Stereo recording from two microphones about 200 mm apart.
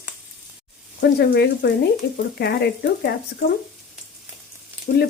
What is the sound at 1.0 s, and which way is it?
Speech, 50° left (ahead or behind).